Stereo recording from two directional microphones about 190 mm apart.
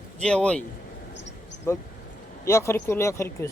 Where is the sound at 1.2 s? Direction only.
70° left (ahead or behind).